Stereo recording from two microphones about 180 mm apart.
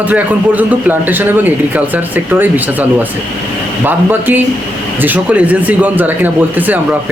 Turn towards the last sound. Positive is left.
turn(degrees=-10)  # may be behind; listen again after turning